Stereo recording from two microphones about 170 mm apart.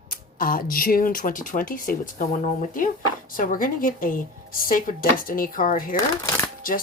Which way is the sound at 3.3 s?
55° left (ahead or behind).